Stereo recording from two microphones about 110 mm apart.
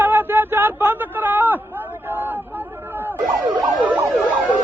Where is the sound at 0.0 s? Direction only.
20° right (ahead or behind).